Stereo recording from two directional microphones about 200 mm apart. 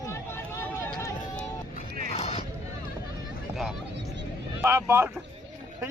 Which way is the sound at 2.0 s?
35° left (ahead or behind).